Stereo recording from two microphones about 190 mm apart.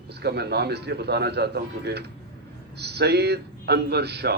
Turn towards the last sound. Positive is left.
turn(degrees=-60)  # may be behind; listen again after turning